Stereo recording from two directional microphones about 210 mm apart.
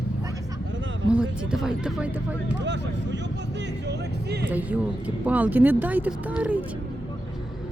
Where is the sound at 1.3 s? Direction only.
5° right (ahead or behind).